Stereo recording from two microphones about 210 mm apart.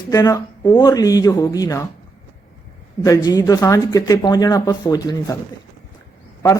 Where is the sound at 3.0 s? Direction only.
15° left (ahead or behind).